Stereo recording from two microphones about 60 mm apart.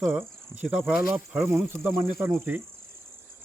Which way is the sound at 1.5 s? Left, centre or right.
Right.